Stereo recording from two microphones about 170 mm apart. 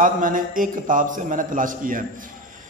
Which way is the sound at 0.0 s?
50° right (ahead or behind).